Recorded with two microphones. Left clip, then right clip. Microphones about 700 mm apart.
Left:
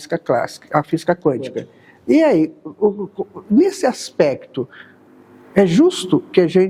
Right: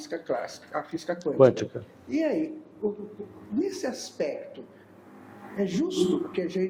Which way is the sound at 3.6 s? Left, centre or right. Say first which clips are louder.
Left 13 dB; left.